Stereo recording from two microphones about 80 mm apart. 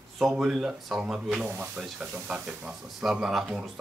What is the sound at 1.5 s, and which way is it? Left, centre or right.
Speech, right.